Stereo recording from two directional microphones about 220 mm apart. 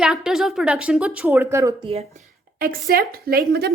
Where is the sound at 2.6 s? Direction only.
40° right (ahead or behind).